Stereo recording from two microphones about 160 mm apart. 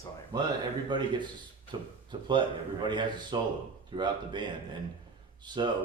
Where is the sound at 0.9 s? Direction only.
30° right (ahead or behind).